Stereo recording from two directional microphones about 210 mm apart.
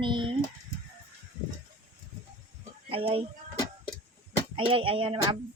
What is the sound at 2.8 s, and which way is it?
Speech, 25° right (ahead or behind).